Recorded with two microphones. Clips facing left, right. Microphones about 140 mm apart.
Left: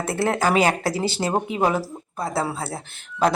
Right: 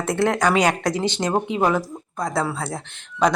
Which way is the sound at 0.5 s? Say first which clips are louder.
Even; 5° left (ahead or behind).